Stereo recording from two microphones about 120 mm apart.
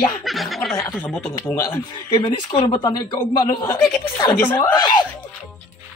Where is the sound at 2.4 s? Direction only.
40° left (ahead or behind).